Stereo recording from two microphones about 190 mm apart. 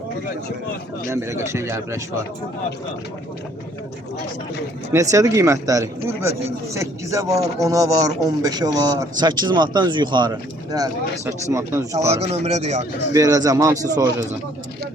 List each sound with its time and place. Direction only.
1.1 s speech: 15° right (ahead or behind)
4.9 s a man's voice: 15° right (ahead or behind)
12.2 s speech: 35° right (ahead or behind)
13.1 s speech: 20° right (ahead or behind)